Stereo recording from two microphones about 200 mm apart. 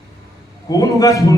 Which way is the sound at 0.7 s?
15° left (ahead or behind).